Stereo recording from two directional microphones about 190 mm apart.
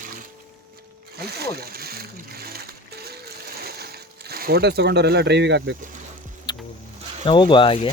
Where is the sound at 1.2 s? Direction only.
55° right (ahead or behind).